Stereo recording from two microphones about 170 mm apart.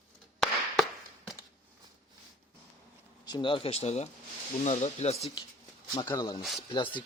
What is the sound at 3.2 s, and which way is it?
Speech, 25° left (ahead or behind).